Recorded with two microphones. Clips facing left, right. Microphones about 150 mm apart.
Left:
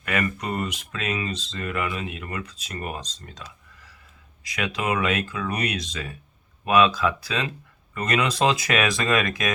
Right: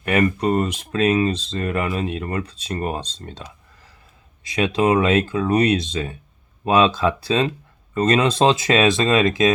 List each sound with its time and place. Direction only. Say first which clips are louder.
0.0 s speech: right 8 dB; 30° right (ahead or behind)
4.4 s speech: right 8 dB; 25° right (ahead or behind)